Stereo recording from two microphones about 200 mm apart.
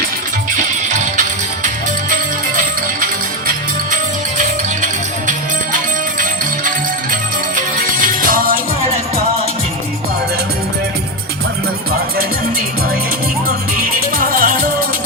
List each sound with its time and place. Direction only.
0.5 s music: 40° right (ahead or behind)
4.4 s music: 40° right (ahead or behind)
6.7 s music: 40° right (ahead or behind)
14.2 s music: 45° right (ahead or behind)